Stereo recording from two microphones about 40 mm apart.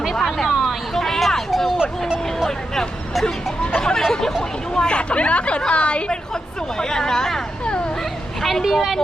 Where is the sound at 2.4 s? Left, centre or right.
Centre.